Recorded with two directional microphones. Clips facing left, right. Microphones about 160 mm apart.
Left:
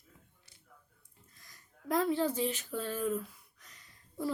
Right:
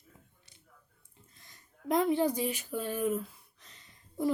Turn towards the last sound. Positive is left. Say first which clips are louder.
# right 5 dB
turn(degrees=-25)  # may be behind; listen again after turning